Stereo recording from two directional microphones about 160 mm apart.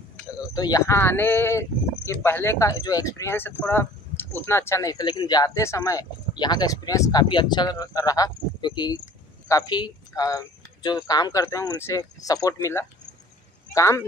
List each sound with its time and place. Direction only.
0.6 s speech: 25° left (ahead or behind)